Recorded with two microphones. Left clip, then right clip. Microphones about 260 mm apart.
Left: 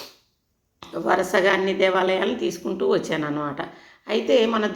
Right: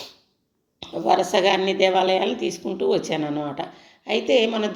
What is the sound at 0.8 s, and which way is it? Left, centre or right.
Speech, centre.